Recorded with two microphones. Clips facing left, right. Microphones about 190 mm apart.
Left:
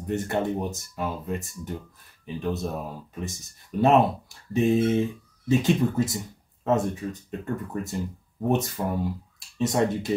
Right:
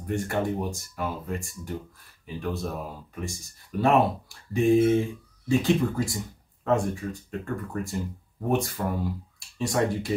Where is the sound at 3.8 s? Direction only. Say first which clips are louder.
Left 2 dB; 20° left (ahead or behind).